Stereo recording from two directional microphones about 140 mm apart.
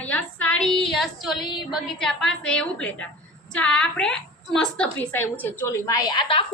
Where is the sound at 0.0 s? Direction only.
10° left (ahead or behind).